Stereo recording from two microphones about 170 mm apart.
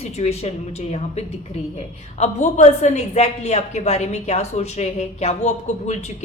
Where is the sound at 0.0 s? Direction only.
40° left (ahead or behind).